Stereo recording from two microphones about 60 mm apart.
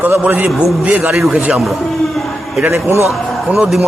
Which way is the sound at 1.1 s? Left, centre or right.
Centre.